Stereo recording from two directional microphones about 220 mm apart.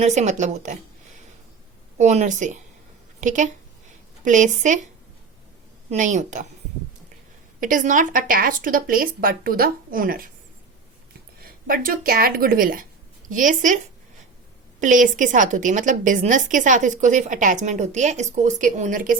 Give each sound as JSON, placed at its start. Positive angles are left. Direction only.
{"t": 0.0, "sound": "a woman's voice", "side_deg": -30}
{"t": 2.0, "sound": "a woman's voice", "side_deg": -30}
{"t": 5.9, "sound": "a woman's voice", "side_deg": -30}
{"t": 7.6, "sound": "a woman's voice", "side_deg": -35}
{"t": 11.4, "sound": "speech", "side_deg": -40}
{"t": 14.8, "sound": "a woman's voice", "side_deg": -35}